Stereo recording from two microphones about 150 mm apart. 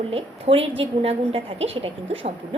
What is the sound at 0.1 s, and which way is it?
A woman's voice, 40° right (ahead or behind).